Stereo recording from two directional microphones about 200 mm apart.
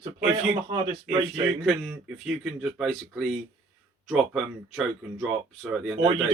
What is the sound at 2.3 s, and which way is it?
Speech, centre (ahead or behind).